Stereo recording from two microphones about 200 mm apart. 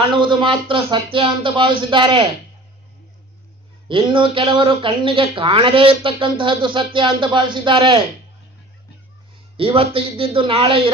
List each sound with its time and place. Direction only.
0.2 s speech: 25° right (ahead or behind)
3.8 s speech: 25° right (ahead or behind)
9.6 s speech: 25° right (ahead or behind)